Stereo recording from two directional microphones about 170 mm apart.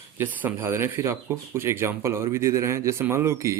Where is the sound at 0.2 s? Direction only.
10° right (ahead or behind).